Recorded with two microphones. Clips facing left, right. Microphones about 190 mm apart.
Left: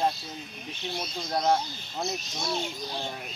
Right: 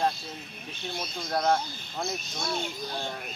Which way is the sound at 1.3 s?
20° left (ahead or behind).